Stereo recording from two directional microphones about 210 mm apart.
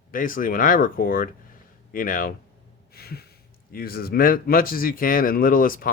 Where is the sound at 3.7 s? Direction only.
45° left (ahead or behind).